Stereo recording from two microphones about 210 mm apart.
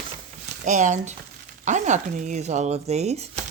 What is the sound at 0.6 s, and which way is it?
Speech, 35° right (ahead or behind).